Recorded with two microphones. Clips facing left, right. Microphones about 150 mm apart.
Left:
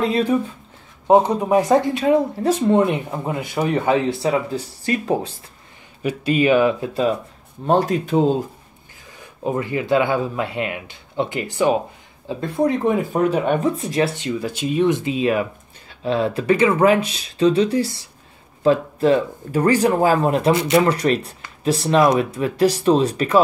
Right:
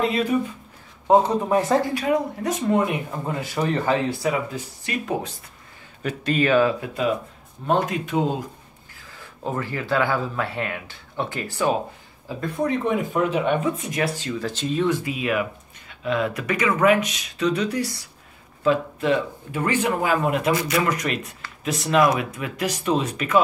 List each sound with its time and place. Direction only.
0.0 s speech: 30° left (ahead or behind)
1.0 s speech: 20° left (ahead or behind)
2.0 s speech: 30° left (ahead or behind)
6.0 s speech: 10° left (ahead or behind)
6.8 s speech: 30° left (ahead or behind)
9.2 s speech: 15° left (ahead or behind)
12.7 s speech: 40° left (ahead or behind)
14.4 s speech: 10° left (ahead or behind); by 23.4 s 35° left (ahead or behind)